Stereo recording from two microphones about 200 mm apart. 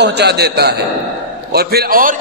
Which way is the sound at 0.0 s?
55° right (ahead or behind).